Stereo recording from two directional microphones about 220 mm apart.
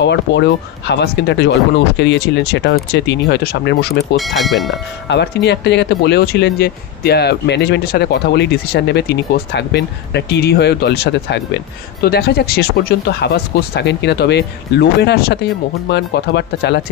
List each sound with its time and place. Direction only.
0.0 s speech: 50° left (ahead or behind)
4.2 s speech: centre (ahead or behind)
5.0 s speech: 50° left (ahead or behind)